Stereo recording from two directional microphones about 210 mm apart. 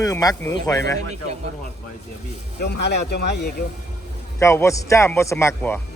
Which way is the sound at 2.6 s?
55° left (ahead or behind).